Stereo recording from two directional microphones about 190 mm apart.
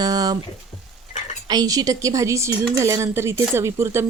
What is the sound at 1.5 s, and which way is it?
Speech, 20° right (ahead or behind).